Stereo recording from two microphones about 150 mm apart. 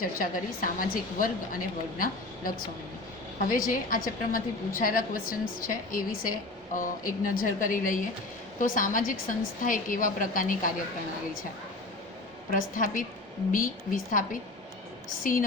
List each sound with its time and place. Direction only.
0.0 s a woman's voice: 70° left (ahead or behind)
12.5 s a woman's voice: 65° left (ahead or behind)